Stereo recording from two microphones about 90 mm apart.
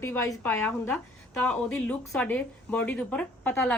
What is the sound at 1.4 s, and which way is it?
Speech, 15° left (ahead or behind).